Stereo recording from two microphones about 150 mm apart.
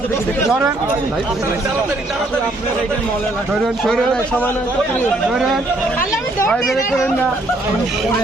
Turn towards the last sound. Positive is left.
turn(degrees=0)  # may be behind; listen again after turning